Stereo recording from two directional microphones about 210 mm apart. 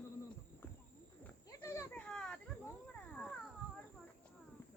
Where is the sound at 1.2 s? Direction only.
15° left (ahead or behind).